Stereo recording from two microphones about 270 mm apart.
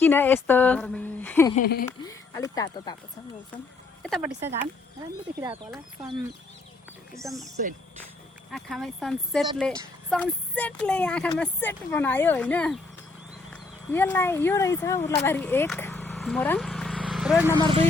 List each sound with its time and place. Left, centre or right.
0.0 s a woman's voice: centre
1.5 s speech: left
1.9 s a woman's voice: centre
4.0 s a woman's voice: centre
7.3 s a woman's voice: centre
8.5 s a woman's voice: centre
17.5 s speech: centre